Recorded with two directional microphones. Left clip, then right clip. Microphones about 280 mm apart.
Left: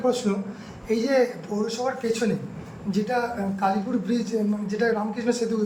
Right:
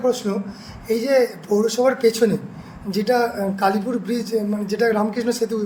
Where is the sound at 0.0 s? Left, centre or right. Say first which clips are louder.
Right 3 dB; right.